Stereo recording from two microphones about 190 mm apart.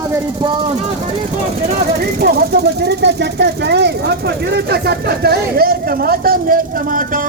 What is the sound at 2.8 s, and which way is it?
Speech, 60° right (ahead or behind).